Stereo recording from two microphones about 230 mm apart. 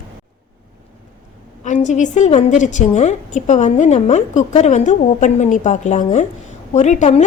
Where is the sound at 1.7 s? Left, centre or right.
Left.